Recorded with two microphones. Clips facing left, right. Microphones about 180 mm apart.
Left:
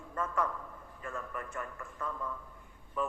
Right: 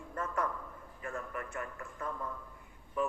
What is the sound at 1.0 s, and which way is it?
Speech, 50° right (ahead or behind).